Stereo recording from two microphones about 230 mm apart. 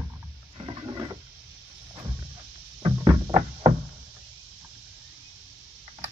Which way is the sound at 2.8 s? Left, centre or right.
Centre.